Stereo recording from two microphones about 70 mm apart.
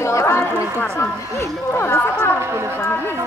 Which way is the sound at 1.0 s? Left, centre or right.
Left.